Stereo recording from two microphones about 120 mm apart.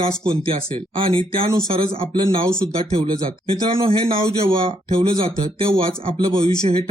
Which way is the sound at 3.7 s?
50° right (ahead or behind).